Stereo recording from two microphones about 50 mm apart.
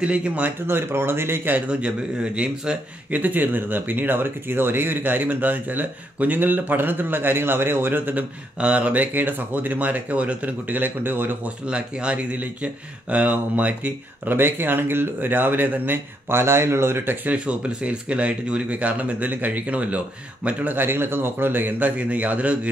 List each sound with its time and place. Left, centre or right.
0.0 s speech: right
0.7 s speech: right
1.7 s speech: right
8.5 s speech: right
11.4 s speech: right
14.3 s speech: right
16.3 s speech: right
17.3 s speech: right
20.4 s speech: right